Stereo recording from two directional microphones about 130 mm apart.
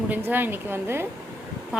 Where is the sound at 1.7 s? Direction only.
5° right (ahead or behind).